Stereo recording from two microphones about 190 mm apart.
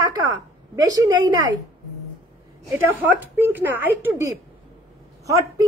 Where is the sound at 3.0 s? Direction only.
10° right (ahead or behind).